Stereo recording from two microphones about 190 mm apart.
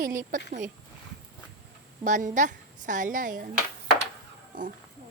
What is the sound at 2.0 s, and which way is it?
A woman's voice, 40° right (ahead or behind).